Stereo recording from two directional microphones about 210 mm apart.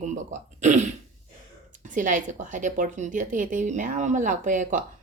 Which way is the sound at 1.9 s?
40° right (ahead or behind).